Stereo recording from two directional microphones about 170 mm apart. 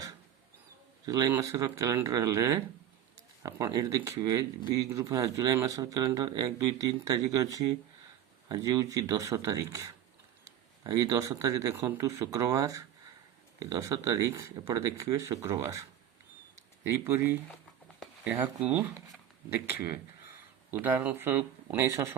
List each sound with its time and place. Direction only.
1.0 s speech: 20° right (ahead or behind)
10.8 s speech: 20° right (ahead or behind)